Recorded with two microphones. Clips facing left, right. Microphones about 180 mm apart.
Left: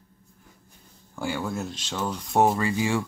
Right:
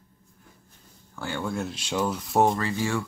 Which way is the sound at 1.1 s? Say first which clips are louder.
Left 1 dB; 10° left (ahead or behind).